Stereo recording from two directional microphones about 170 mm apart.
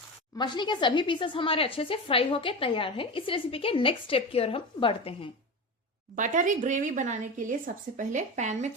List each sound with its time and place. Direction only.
0.3 s speech: 25° left (ahead or behind)
6.1 s a woman's voice: 50° right (ahead or behind)